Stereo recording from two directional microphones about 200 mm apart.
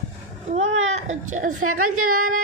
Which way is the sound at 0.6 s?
80° right.